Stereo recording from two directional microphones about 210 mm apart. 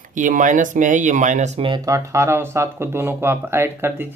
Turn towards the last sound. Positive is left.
turn(degrees=-10)  # may be behind; listen again after turning